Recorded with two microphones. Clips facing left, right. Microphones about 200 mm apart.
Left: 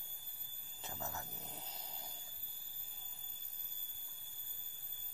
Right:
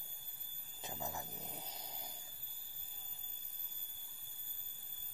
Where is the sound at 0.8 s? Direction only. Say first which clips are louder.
Right 2 dB; 15° right (ahead or behind).